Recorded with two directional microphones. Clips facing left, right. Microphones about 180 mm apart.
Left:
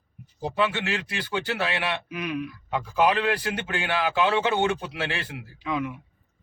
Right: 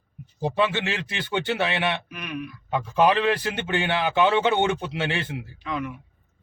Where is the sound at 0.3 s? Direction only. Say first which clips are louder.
Right 2 dB; 25° right (ahead or behind).